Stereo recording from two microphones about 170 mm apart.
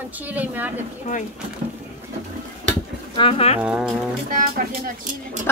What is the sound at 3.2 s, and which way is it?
Speech, 35° left (ahead or behind).